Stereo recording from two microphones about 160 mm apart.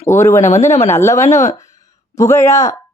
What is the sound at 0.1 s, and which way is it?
Speech, 20° left (ahead or behind).